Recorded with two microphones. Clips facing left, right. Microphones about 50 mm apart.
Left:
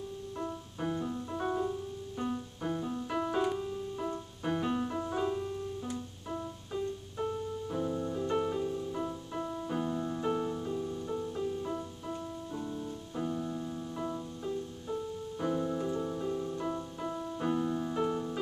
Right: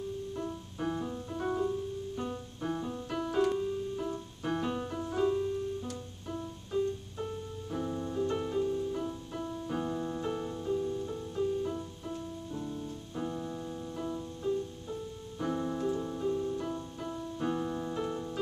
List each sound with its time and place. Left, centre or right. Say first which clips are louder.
0.7 s piano: even; centre
2.7 s music: left 1 dB; centre
3.2 s keyboard: right 2 dB; centre
6.7 s piano: right 5 dB; centre
7.8 s music: right 2 dB; centre
9.0 s music: left 1 dB; centre
9.7 s music: right 1 dB; centre
10.2 s music: left 2 dB; centre
13.2 s piano: left 2 dB; centre
13.9 s music: right 1 dB; centre
15.4 s keyboard: even; centre
17.0 s piano: even; centre